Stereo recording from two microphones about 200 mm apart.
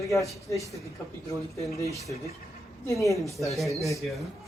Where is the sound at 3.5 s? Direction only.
Centre (ahead or behind).